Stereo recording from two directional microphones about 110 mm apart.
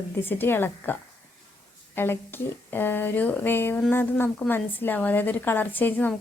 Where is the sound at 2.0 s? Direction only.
20° left (ahead or behind).